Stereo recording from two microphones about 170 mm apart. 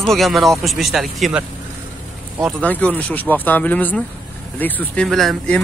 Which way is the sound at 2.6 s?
10° left (ahead or behind).